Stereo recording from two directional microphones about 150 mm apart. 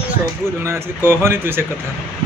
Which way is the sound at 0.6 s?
15° right (ahead or behind).